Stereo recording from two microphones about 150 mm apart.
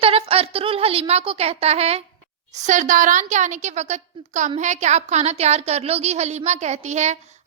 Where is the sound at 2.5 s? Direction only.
55° right (ahead or behind).